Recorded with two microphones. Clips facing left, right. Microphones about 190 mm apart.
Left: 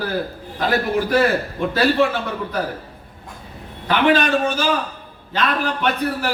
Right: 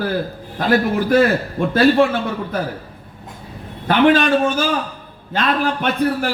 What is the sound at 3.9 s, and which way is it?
A man's voice, 50° right (ahead or behind).